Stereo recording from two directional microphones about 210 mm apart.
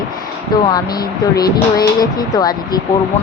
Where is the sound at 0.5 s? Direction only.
20° left (ahead or behind).